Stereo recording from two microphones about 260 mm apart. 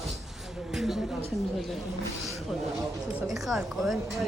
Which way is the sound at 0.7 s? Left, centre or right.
Centre.